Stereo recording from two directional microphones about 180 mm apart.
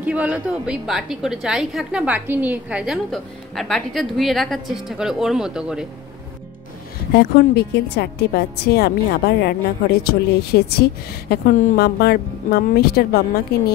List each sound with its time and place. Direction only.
0.0 s a woman's voice: 10° right (ahead or behind)
7.2 s a woman's voice: 65° left (ahead or behind)